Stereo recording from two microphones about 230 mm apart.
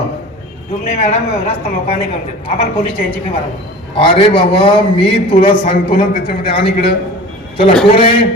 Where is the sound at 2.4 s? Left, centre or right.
Left.